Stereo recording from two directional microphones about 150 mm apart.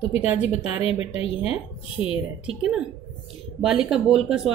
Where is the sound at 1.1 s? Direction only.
40° left (ahead or behind).